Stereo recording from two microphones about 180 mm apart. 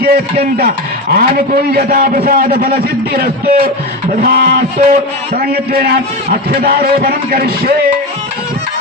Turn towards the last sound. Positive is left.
turn(degrees=-55)  # may be behind; listen again after turning